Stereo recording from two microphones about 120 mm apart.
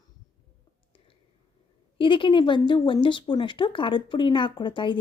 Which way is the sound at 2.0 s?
45° left (ahead or behind).